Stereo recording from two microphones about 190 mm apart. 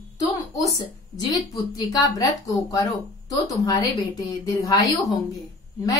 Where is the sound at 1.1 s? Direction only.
20° left (ahead or behind).